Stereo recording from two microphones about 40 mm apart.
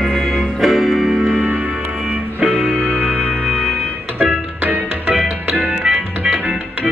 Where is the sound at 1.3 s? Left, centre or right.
Right.